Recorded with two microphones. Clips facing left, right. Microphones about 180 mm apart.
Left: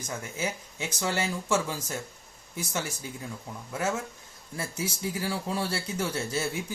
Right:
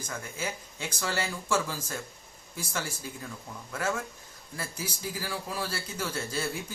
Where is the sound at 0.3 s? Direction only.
20° left (ahead or behind).